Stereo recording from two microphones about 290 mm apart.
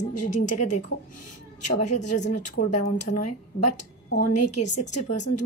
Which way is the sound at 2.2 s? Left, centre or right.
Left.